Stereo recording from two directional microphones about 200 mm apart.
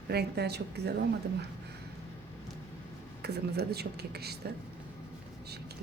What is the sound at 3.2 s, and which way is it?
Speech, 55° right (ahead or behind).